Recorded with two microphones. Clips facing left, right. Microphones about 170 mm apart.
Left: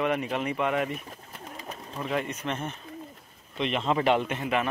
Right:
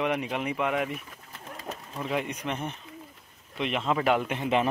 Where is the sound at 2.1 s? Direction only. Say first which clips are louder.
Even; 15° right (ahead or behind).